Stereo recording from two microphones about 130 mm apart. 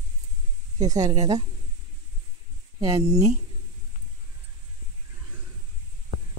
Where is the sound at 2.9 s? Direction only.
55° right (ahead or behind).